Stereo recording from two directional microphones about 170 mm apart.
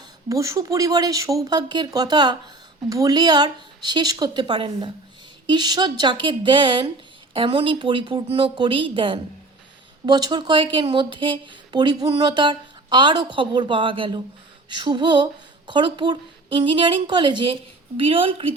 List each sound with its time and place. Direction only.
0.3 s speech: 20° right (ahead or behind)